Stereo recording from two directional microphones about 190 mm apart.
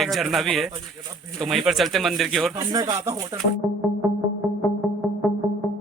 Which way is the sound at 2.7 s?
20° right (ahead or behind).